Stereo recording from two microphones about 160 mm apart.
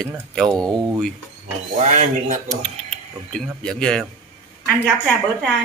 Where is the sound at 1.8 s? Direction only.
50° right (ahead or behind).